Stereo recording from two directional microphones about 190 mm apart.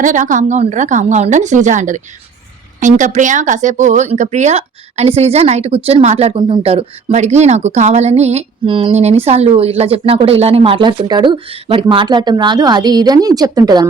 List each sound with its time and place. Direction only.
0.0 s a woman's voice: 40° right (ahead or behind); by 13.8 s 20° right (ahead or behind)